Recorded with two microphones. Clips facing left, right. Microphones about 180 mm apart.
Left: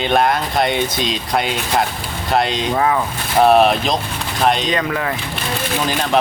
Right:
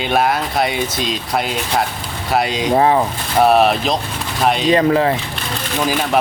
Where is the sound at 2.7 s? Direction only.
30° right (ahead or behind).